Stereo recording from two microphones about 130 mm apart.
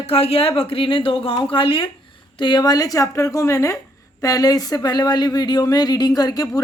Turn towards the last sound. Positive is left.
turn(degrees=30)  # may be behind; listen again after turning